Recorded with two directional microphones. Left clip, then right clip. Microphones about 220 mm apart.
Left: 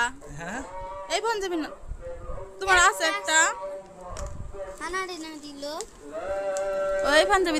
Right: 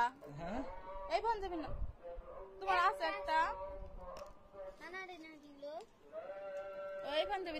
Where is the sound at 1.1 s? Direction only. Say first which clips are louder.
Left 10 dB; 25° left (ahead or behind).